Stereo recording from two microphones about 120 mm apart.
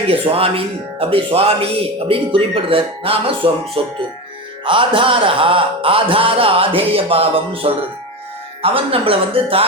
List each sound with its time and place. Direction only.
0.1 s speech: 55° right (ahead or behind)